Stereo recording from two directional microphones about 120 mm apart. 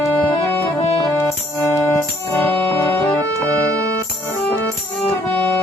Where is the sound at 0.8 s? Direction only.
55° left (ahead or behind).